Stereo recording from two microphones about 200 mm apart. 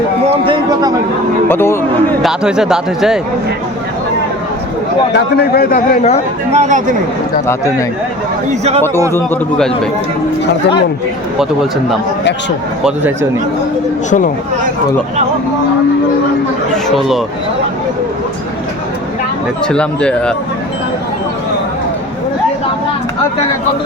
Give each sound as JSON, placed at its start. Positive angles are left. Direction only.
{"t": 0.4, "sound": "a sound", "side_deg": -20}
{"t": 1.5, "sound": "speech", "side_deg": 10}
{"t": 2.2, "sound": "speech", "side_deg": -5}
{"t": 5.1, "sound": "a man's voice", "side_deg": 50}
{"t": 6.5, "sound": "speech", "side_deg": -35}
{"t": 8.4, "sound": "speech", "side_deg": -35}
{"t": 9.1, "sound": "a man's voice", "side_deg": 5}
{"t": 16.7, "sound": "speech", "side_deg": 0}
{"t": 19.6, "sound": "speech", "side_deg": 5}